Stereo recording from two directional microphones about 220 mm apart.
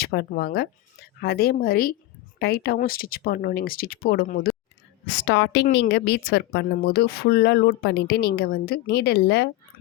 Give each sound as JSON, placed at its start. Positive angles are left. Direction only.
{"t": 0.0, "sound": "speech", "side_deg": 45}
{"t": 5.0, "sound": "speech", "side_deg": 55}